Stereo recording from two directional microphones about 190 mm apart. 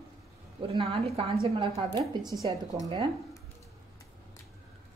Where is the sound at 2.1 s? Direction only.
20° right (ahead or behind).